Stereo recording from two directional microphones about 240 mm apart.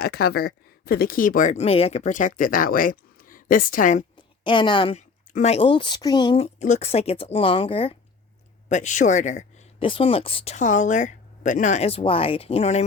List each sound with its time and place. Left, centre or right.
0.0 s speech: left
4.4 s speech: centre